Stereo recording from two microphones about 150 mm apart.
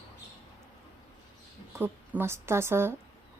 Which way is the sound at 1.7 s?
15° right (ahead or behind).